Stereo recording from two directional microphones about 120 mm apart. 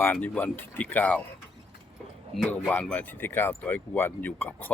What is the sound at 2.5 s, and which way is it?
Speech, 10° left (ahead or behind).